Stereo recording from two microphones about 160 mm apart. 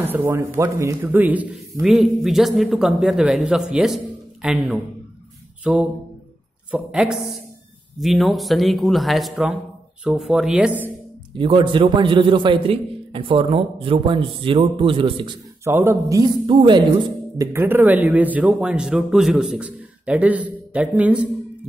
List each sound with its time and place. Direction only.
0.0 s a man's voice: 15° right (ahead or behind)
5.6 s a sound: 5° right (ahead or behind)
6.7 s a man's voice: 5° right (ahead or behind)
11.3 s a man's voice: 30° right (ahead or behind)
15.6 s a man's voice: 15° right (ahead or behind)
16.4 s a man's voice: 30° right (ahead or behind)
17.4 s a man's voice: 15° right (ahead or behind)